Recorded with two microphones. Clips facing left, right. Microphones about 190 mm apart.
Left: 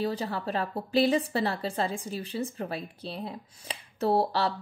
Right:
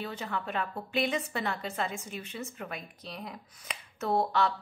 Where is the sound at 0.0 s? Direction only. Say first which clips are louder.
Left 6 dB; 35° left (ahead or behind).